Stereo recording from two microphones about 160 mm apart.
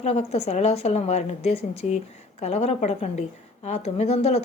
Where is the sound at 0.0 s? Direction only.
40° left (ahead or behind).